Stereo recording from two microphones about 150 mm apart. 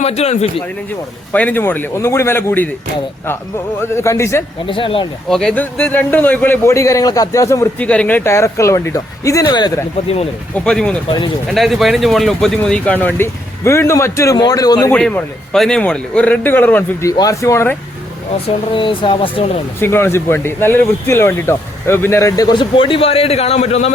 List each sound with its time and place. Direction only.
0.0 s a man's voice: 45° left (ahead or behind)
1.3 s speech: 10° left (ahead or behind)
3.8 s speech: 15° left (ahead or behind)
4.6 s speech: 35° left (ahead or behind)
5.3 s speech: 5° left (ahead or behind); by 7.7 s 20° left (ahead or behind)
7.8 s speech: 10° left (ahead or behind); by 9.8 s 30° left (ahead or behind)
10.5 s speech: 5° left (ahead or behind); by 14.8 s 25° left (ahead or behind)
14.8 s speech: 10° left (ahead or behind)
18.4 s speech: 35° left (ahead or behind)
19.8 s speech: 15° left (ahead or behind); by 23.9 s 45° left (ahead or behind)